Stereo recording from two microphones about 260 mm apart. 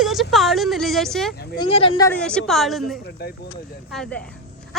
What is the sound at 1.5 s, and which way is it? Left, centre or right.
Speech, left.